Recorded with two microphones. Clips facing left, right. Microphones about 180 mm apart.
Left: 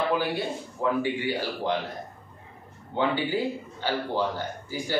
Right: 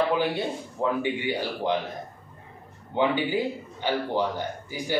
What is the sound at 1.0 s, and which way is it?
Speech, 20° right (ahead or behind).